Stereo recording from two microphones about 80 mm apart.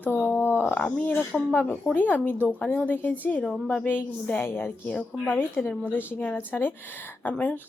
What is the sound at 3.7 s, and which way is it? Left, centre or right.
A woman's voice, left.